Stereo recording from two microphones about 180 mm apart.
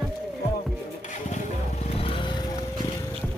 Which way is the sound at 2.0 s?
30° left (ahead or behind).